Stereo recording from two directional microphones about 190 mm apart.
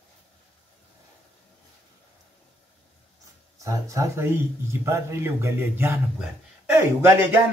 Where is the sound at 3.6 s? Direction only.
15° right (ahead or behind).